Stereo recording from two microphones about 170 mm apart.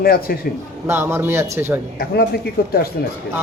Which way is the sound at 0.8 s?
15° right (ahead or behind).